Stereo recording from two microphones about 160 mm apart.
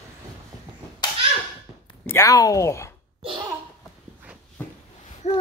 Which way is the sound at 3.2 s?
30° right (ahead or behind).